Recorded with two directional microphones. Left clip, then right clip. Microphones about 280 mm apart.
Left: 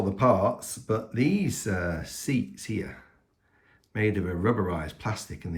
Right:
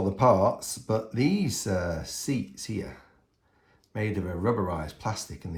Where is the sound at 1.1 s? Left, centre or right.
Centre.